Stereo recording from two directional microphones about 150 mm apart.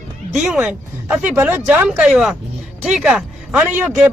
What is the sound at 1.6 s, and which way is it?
Speech, 10° right (ahead or behind).